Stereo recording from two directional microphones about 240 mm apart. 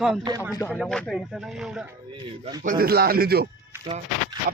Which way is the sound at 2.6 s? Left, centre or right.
Right.